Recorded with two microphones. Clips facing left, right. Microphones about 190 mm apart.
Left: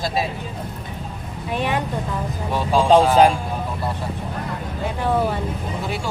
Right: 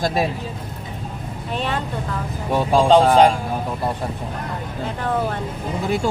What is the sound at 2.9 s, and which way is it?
Speech, 5° left (ahead or behind).